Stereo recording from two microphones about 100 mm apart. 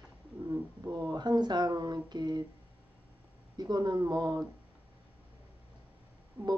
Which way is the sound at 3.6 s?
45° right (ahead or behind).